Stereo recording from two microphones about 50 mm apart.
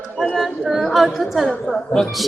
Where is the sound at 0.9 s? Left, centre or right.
Centre.